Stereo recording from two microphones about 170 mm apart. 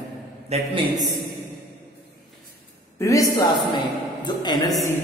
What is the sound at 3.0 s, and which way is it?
A woman's voice, 20° left (ahead or behind).